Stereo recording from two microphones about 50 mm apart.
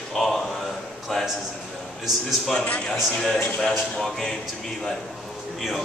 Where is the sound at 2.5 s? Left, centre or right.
Left.